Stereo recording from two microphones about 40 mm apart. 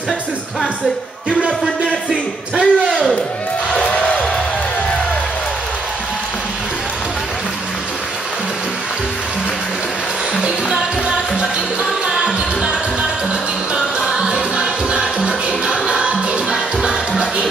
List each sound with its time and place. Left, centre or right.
2.0 s a sound: centre
3.8 s music: left
10.4 s music: right
13.7 s music: centre